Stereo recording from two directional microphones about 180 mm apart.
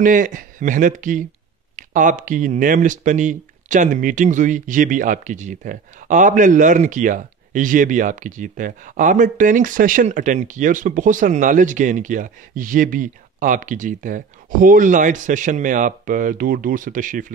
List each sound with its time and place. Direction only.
0.0 s speech: 45° right (ahead or behind)